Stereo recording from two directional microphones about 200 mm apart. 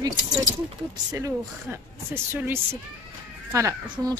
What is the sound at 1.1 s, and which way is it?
Speech, 15° right (ahead or behind).